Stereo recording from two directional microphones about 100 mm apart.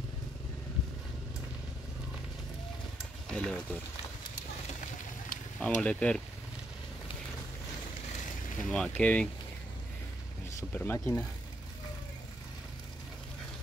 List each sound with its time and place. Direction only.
3.3 s speech: 10° left (ahead or behind)
5.6 s speech: 15° left (ahead or behind)
8.6 s speech: 5° left (ahead or behind)
10.7 s speech: 20° left (ahead or behind)